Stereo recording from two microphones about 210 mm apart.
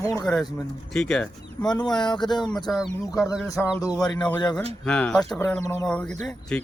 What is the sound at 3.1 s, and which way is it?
Speech, 15° left (ahead or behind).